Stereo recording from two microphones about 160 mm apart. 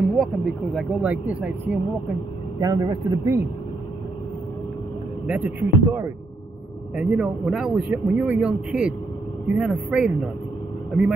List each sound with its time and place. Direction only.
0.2 s speech: centre (ahead or behind)
2.6 s a man's voice: 25° right (ahead or behind)
5.2 s speech: 10° right (ahead or behind)
7.0 s speech: centre (ahead or behind)